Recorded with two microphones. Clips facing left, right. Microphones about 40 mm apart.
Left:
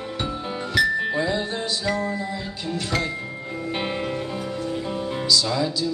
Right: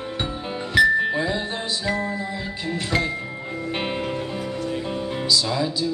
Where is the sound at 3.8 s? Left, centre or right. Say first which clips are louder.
Even; centre.